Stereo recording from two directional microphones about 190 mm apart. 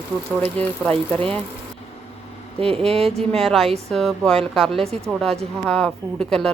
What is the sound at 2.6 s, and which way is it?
Speech, 30° right (ahead or behind).